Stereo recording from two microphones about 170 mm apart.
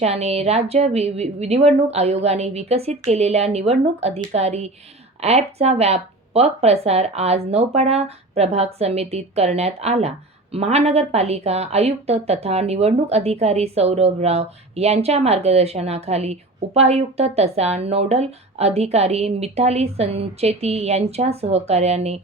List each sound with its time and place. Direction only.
0.0 s a woman's voice: 40° right (ahead or behind)